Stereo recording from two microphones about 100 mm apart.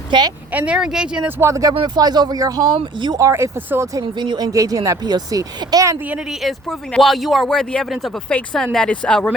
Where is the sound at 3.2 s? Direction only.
30° right (ahead or behind).